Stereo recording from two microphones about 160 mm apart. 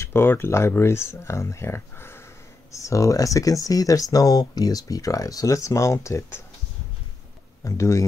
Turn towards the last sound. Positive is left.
turn(degrees=20)  # may be behind; listen again after turning